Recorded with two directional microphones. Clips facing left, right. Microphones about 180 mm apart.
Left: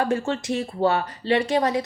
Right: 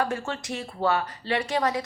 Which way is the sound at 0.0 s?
25° left (ahead or behind).